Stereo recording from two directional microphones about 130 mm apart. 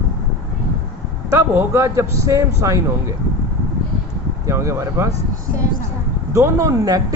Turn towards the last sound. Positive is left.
turn(degrees=-25)  # may be behind; listen again after turning